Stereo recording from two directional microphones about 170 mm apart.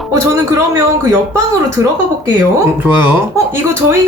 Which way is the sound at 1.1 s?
15° right (ahead or behind).